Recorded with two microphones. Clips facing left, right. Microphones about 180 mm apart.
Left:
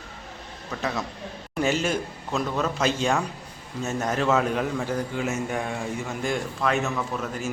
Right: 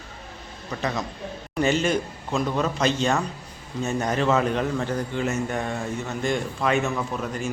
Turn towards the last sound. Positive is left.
turn(degrees=0)  # may be behind; listen again after turning